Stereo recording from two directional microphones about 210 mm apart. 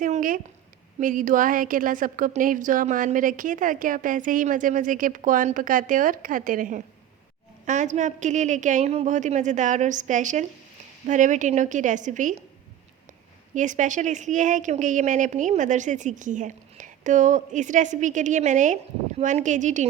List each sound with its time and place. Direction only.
0.0 s a sound: 40° right (ahead or behind)
0.9 s speech: 40° right (ahead or behind)
13.5 s speech: 35° right (ahead or behind)